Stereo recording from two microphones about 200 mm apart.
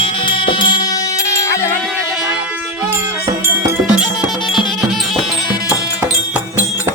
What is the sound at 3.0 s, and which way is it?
Music, 15° right (ahead or behind).